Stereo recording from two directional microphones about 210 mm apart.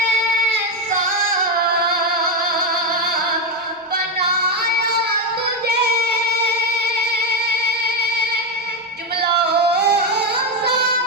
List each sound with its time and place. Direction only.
4.2 s child singing: 50° right (ahead or behind)
9.7 s singing: 55° right (ahead or behind)